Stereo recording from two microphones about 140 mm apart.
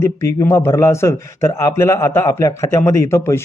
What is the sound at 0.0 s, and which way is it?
A man's voice, 20° left (ahead or behind).